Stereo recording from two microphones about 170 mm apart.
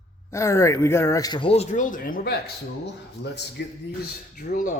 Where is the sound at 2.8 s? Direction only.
85° left.